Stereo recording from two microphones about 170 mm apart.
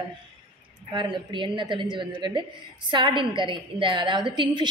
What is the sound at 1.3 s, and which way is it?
A woman's voice, 30° right (ahead or behind).